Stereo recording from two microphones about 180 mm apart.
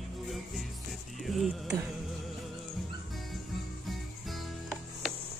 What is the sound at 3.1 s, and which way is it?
Music, centre (ahead or behind).